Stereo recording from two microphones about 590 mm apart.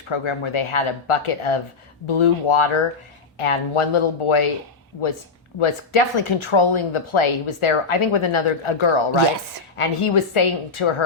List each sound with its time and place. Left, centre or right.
0.1 s speech: left
5.5 s speech: left